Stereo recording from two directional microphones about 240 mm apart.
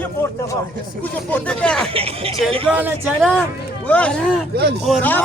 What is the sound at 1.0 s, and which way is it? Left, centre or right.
Speech, centre.